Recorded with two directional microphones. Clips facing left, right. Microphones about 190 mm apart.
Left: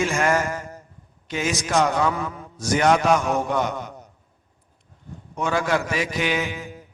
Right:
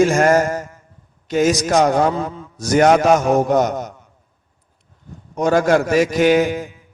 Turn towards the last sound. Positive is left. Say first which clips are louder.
# right 11 dB
turn(degrees=-40)  # may be behind; listen again after turning